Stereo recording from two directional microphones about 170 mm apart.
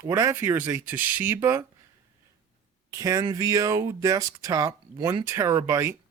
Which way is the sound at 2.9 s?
20° right (ahead or behind).